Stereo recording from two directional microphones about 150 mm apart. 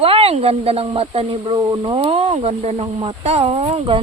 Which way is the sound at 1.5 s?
25° right (ahead or behind).